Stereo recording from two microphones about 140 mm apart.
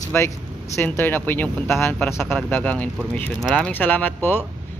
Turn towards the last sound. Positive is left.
turn(degrees=15)  # may be behind; listen again after turning